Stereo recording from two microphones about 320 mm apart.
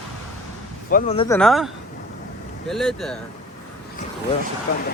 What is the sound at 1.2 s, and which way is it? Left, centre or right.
Speech, centre.